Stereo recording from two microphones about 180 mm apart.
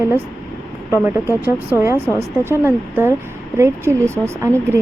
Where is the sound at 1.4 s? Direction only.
10° right (ahead or behind).